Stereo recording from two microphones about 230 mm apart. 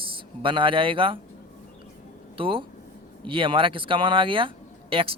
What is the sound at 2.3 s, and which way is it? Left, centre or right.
Speech, right.